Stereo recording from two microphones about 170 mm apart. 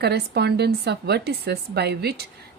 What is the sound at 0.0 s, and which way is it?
Speech, 75° right (ahead or behind).